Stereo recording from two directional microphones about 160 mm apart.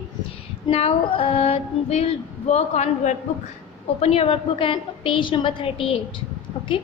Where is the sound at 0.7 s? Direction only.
40° left (ahead or behind).